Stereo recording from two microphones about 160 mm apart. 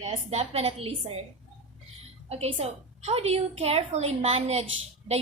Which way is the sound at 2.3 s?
40° right (ahead or behind).